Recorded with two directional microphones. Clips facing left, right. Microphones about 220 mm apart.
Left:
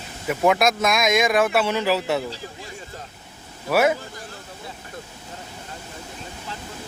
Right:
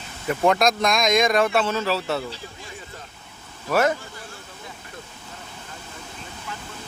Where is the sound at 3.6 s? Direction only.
10° left (ahead or behind).